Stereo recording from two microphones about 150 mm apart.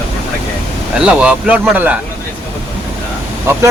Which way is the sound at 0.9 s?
10° right (ahead or behind).